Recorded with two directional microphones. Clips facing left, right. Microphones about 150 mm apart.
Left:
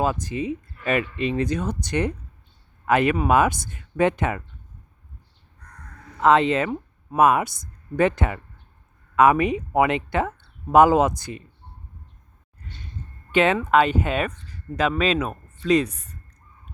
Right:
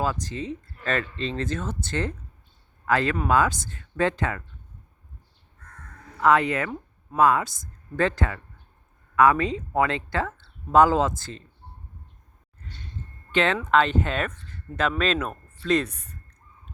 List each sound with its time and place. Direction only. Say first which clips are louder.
0.0 s speech: left 4 dB; 15° left (ahead or behind)
6.1 s speech: left 3 dB; 25° left (ahead or behind)
13.3 s speech: left 3 dB; 15° left (ahead or behind)